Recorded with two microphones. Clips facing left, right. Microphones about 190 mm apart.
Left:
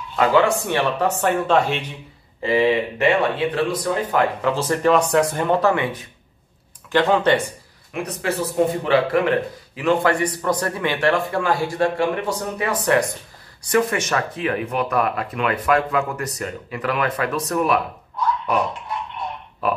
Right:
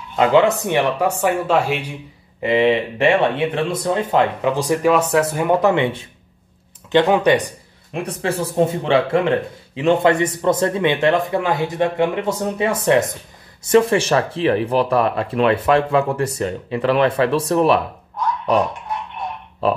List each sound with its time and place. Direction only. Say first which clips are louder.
0.1 s speech: right 3 dB; 20° right (ahead or behind)
2.4 s speech: right 2 dB; 25° right (ahead or behind)
7.9 s speech: right 2 dB; 30° right (ahead or behind)